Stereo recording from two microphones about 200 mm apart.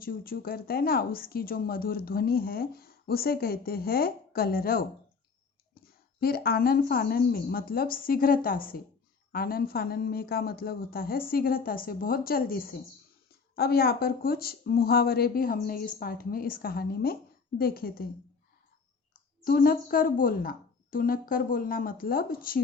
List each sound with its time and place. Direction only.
0.0 s speech: 45° left (ahead or behind)
6.1 s speech: 50° left (ahead or behind)
19.5 s speech: 45° left (ahead or behind)